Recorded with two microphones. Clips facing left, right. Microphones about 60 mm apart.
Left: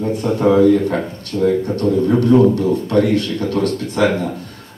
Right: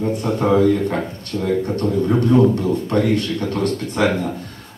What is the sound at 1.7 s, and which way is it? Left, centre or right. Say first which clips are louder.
Speech: left 3 dB; right.